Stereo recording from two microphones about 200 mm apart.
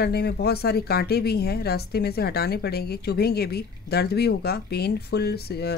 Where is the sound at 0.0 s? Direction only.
55° left (ahead or behind).